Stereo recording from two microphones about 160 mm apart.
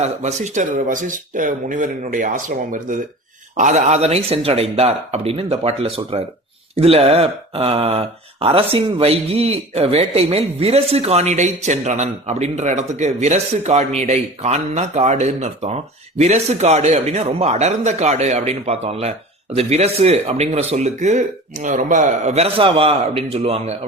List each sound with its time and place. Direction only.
0.0 s speech: 45° right (ahead or behind)